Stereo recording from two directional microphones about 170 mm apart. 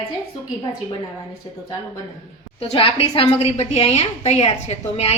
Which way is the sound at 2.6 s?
35° left (ahead or behind).